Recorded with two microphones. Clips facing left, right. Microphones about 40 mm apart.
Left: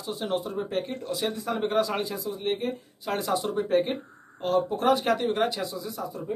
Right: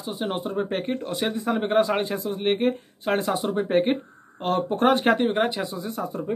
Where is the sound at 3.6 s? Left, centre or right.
Right.